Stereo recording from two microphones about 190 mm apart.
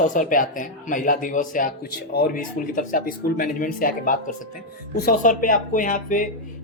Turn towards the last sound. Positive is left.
turn(degrees=45)  # may be behind; listen again after turning